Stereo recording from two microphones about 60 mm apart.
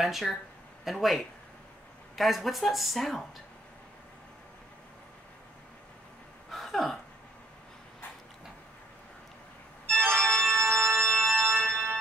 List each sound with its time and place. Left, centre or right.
0.0 s speech: centre
6.5 s a sound: centre
10.1 s organ: centre
10.4 s music: right